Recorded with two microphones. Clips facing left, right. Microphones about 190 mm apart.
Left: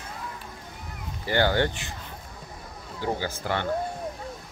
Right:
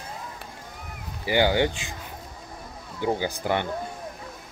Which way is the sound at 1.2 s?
10° right (ahead or behind).